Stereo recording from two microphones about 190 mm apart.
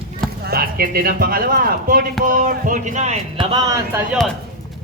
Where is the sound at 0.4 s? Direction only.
50° right (ahead or behind).